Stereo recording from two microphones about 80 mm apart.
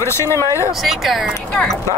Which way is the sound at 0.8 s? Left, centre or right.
Centre.